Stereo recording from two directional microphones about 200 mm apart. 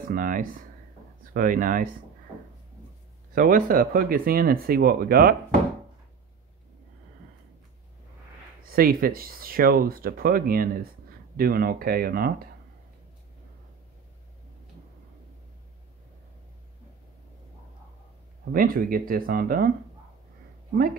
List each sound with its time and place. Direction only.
0.0 s speech: 45° right (ahead or behind)
3.3 s speech: 45° right (ahead or behind)
8.6 s speech: 45° right (ahead or behind)
18.5 s speech: 45° right (ahead or behind)